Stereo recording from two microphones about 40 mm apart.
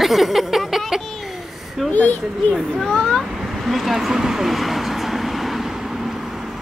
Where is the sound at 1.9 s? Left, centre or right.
Left.